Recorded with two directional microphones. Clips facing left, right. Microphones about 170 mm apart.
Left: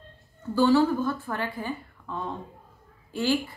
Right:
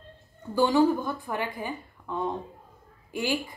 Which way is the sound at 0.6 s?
15° right (ahead or behind).